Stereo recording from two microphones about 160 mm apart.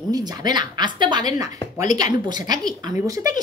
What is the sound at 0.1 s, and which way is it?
Speech, 25° right (ahead or behind).